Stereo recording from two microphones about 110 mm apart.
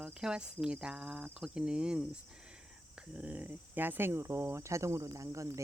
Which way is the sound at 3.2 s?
15° right (ahead or behind).